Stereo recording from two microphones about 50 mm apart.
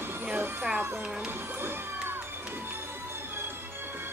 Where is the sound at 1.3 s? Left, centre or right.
Right.